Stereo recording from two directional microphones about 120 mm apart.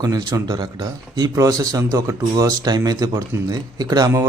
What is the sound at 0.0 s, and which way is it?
A man's voice, 30° right (ahead or behind).